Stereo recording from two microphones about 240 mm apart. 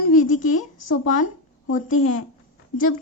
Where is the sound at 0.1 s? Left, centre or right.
Left.